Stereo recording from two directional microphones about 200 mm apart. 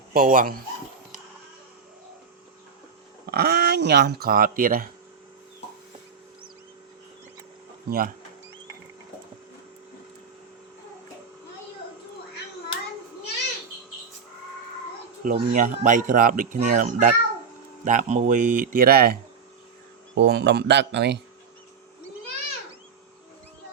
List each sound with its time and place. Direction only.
0.1 s speech: 45° right (ahead or behind)
3.2 s speech: 55° right (ahead or behind)
7.9 s speech: 45° right (ahead or behind)
15.2 s speech: 40° right (ahead or behind)
20.1 s speech: 55° right (ahead or behind)